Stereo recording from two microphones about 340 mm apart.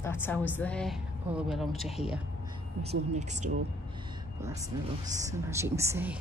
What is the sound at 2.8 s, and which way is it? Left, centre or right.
Speech, centre.